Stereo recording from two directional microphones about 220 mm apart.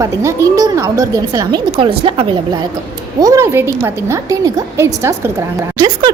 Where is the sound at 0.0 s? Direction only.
15° right (ahead or behind).